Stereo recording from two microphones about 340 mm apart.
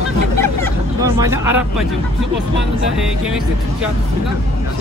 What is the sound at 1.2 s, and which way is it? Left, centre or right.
Speech, centre.